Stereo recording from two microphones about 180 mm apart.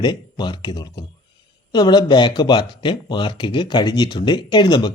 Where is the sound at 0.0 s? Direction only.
25° left (ahead or behind).